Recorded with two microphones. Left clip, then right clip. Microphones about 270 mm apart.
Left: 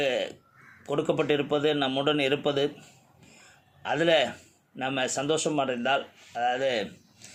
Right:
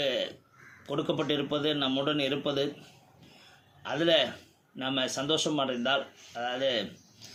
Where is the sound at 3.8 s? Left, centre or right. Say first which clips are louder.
Left 2 dB; left.